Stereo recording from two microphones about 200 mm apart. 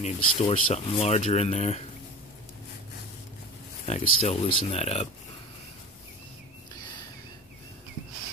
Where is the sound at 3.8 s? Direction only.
30° left (ahead or behind).